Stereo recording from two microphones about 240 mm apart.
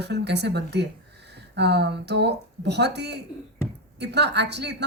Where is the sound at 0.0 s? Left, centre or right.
Right.